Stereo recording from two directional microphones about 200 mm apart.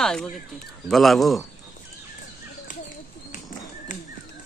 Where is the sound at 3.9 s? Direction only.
40° left (ahead or behind).